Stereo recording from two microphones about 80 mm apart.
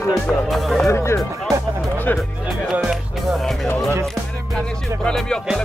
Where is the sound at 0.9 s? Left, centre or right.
Left.